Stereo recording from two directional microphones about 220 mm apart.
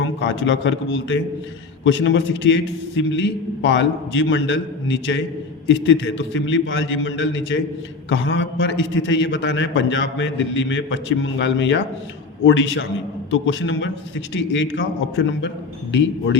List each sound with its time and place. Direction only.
0.0 s a man's voice: 55° left (ahead or behind)